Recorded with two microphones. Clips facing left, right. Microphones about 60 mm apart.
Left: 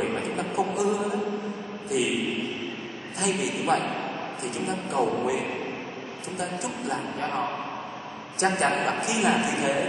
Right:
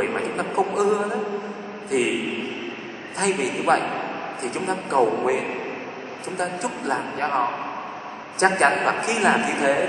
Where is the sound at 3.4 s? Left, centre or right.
Right.